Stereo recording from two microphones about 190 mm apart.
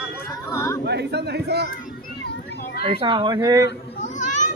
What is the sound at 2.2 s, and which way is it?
Children playing, 60° left (ahead or behind).